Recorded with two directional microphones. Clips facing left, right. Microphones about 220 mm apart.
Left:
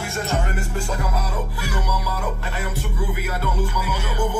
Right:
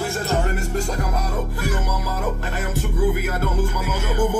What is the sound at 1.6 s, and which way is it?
Music, 45° right (ahead or behind).